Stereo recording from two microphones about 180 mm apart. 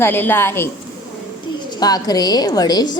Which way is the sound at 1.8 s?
20° left (ahead or behind).